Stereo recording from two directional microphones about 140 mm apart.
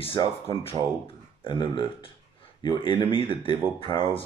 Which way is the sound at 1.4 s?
35° left (ahead or behind).